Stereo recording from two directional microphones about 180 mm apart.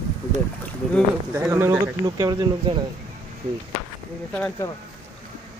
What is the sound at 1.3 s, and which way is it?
Speech, 15° right (ahead or behind).